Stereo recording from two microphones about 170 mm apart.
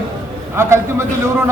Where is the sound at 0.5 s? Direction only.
15° right (ahead or behind).